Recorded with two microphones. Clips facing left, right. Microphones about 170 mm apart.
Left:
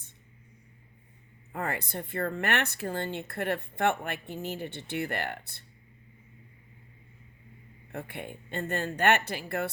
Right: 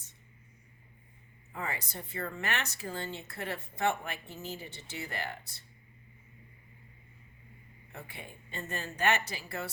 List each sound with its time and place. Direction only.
1.5 s speech: 60° left (ahead or behind)
7.9 s speech: 60° left (ahead or behind)